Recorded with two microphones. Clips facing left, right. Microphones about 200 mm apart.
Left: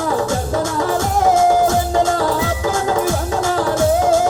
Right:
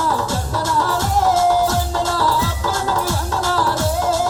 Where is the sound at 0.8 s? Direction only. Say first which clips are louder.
Even; 60° left (ahead or behind).